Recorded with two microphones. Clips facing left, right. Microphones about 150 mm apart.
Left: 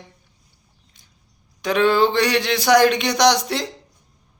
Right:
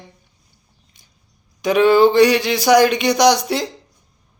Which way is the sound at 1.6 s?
10° right (ahead or behind).